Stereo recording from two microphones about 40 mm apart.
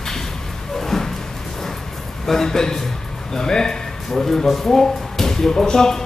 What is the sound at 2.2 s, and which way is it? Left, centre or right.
A man's voice, centre.